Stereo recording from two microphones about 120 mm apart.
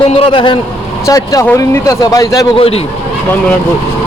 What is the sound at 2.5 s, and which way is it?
Speech, 55° left (ahead or behind).